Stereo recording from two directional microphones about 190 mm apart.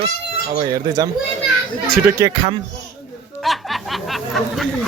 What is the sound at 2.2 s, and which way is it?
Speech, 15° right (ahead or behind).